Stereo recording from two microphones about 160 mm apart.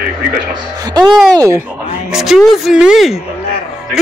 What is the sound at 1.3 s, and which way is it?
Speech, 20° right (ahead or behind).